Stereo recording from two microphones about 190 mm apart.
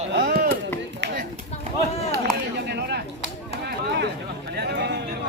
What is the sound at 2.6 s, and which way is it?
Speech, 60° right (ahead or behind).